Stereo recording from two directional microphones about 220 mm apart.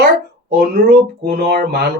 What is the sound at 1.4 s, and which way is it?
Speech, 45° right (ahead or behind).